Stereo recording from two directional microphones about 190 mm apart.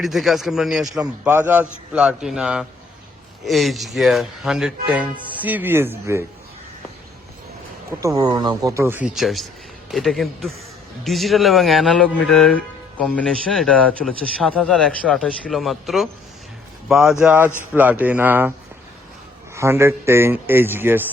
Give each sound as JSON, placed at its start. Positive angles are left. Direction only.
{"t": 0.0, "sound": "speech", "side_deg": 0}
{"t": 7.9, "sound": "speech", "side_deg": -15}
{"t": 19.5, "sound": "speech", "side_deg": -15}